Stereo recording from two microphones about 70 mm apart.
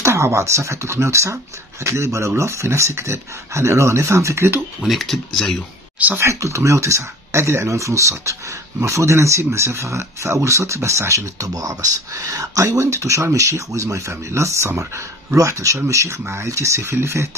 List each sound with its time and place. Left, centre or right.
0.0 s speech: right
4.8 s speech: centre
6.1 s speech: right